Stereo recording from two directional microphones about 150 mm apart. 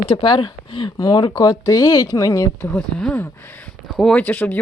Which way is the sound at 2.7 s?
5° left (ahead or behind).